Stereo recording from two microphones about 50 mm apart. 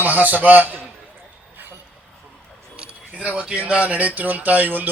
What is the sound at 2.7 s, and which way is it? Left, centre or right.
Speech, right.